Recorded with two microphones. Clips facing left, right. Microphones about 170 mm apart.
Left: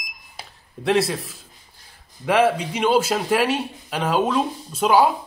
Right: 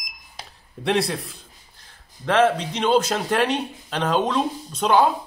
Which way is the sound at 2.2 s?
10° left (ahead or behind).